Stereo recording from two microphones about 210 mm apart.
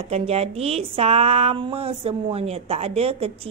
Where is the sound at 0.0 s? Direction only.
30° right (ahead or behind).